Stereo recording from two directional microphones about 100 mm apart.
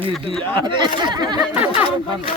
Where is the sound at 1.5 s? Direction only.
15° right (ahead or behind).